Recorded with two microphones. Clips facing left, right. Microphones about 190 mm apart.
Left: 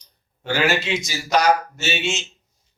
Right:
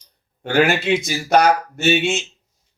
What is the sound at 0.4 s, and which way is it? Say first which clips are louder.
A man's voice: right 4 dB; 55° right (ahead or behind).